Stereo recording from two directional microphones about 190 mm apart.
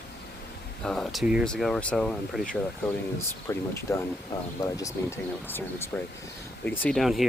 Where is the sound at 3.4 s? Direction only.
15° left (ahead or behind).